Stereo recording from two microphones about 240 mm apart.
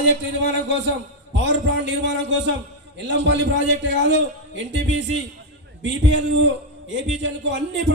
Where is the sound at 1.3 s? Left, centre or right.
Right.